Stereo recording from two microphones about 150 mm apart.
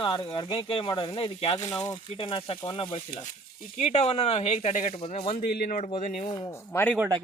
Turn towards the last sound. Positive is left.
turn(degrees=10)  # may be behind; listen again after turning